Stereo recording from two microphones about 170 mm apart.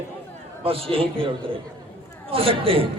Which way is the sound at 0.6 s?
35° right (ahead or behind).